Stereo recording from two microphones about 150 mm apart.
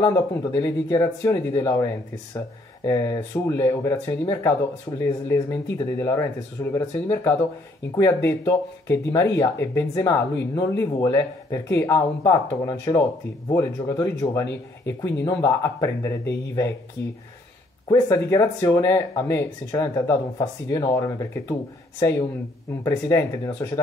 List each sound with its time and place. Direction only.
0.0 s speech: 20° left (ahead or behind)
17.9 s speech: 20° left (ahead or behind)
22.8 s speech: 15° left (ahead or behind)